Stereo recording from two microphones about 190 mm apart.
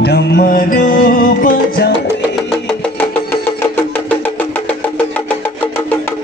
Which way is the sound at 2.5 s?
5° left (ahead or behind).